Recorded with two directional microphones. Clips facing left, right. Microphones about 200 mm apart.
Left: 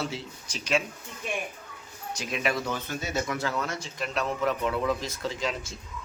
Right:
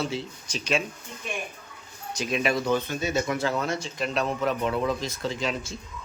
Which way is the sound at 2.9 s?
5° left (ahead or behind).